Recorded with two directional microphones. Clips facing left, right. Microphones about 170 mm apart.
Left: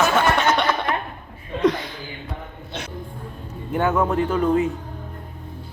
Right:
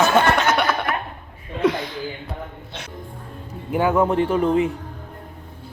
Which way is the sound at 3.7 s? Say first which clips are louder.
Right 2 dB; 10° right (ahead or behind).